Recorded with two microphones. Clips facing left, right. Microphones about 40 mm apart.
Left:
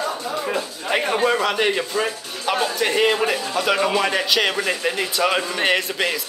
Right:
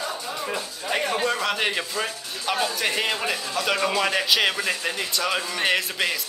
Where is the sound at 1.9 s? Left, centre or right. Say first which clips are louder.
Left 5 dB; centre.